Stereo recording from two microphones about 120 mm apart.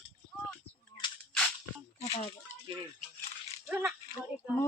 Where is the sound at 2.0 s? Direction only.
60° left (ahead or behind).